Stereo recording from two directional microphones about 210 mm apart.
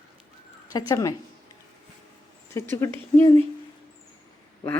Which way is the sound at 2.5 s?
15° left (ahead or behind).